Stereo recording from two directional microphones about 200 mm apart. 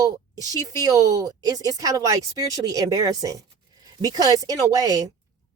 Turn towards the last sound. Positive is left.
turn(degrees=-20)  # may be behind; listen again after turning